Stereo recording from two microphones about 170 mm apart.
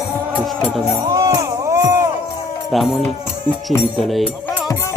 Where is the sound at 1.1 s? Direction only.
20° right (ahead or behind).